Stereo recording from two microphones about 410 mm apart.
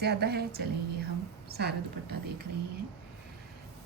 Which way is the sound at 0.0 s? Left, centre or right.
Right.